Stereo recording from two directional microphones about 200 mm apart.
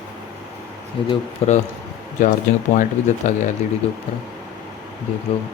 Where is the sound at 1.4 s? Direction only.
30° left (ahead or behind).